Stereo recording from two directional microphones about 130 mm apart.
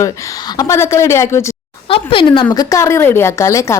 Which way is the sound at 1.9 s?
45° left (ahead or behind).